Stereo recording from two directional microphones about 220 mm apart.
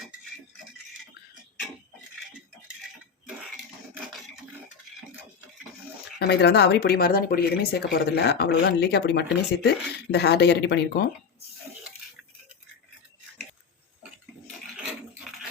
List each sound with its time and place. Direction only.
6.1 s speech: 50° left (ahead or behind)